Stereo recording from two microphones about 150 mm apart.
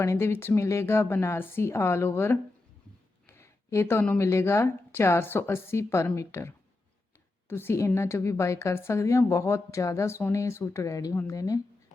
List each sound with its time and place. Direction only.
0.0 s a woman's voice: 20° left (ahead or behind)